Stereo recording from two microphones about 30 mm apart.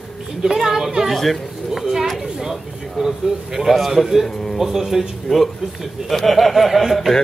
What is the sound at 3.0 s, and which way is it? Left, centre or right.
Speech, centre.